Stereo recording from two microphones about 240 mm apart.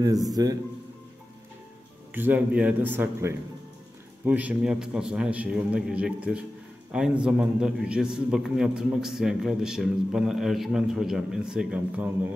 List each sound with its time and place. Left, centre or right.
0.3 s a man's voice: centre
2.1 s a man's voice: centre